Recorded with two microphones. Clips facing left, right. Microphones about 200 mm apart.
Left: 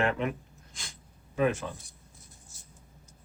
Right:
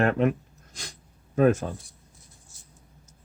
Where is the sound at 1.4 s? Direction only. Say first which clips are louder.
Right 7 dB; 45° right (ahead or behind).